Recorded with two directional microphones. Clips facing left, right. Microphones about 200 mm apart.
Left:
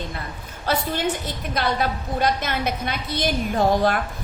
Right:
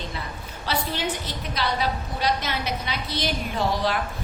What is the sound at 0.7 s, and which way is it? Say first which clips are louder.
A woman's voice: left 4 dB; 50° left (ahead or behind).